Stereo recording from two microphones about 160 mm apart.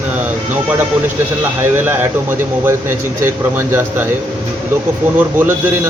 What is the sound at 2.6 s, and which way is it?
Speech, 15° right (ahead or behind).